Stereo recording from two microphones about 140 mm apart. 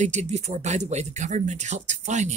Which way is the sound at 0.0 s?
55° right (ahead or behind).